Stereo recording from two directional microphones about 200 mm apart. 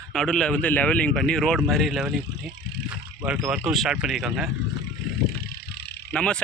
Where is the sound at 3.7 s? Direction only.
Centre (ahead or behind).